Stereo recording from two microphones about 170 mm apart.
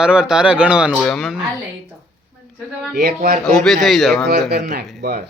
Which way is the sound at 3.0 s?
65° right (ahead or behind).